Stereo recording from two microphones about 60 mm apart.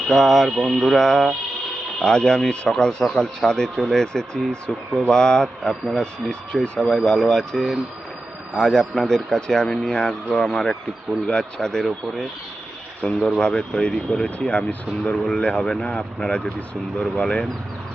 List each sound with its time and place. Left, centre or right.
0.1 s speech: centre
0.8 s speech: centre
13.1 s speech: centre
13.4 s speech: centre